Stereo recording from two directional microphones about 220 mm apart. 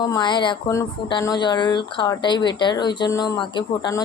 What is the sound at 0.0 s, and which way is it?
Speech, 20° left (ahead or behind).